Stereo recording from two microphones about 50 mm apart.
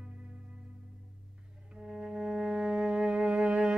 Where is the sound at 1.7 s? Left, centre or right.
Centre.